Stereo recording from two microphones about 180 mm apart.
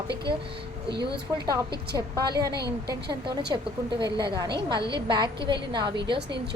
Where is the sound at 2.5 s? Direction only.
65° right (ahead or behind).